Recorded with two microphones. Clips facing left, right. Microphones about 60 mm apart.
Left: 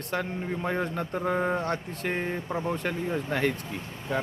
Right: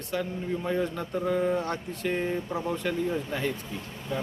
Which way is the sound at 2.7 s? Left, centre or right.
Left.